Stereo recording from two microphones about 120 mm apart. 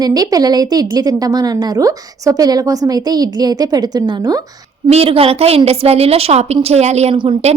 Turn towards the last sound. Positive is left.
turn(degrees=-60)  # may be behind; listen again after turning